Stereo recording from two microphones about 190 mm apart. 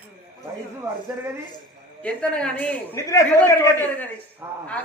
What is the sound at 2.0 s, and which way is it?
Speech, 5° left (ahead or behind).